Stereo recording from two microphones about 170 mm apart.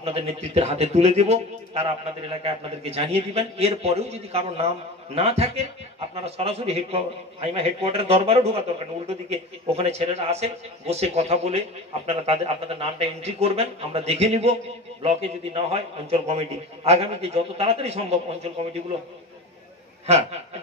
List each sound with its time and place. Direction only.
0.0 s a man's voice: 35° right (ahead or behind)
20.1 s a man's voice: 35° right (ahead or behind)